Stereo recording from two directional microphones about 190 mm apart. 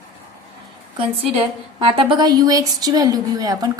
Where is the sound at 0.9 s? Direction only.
30° right (ahead or behind).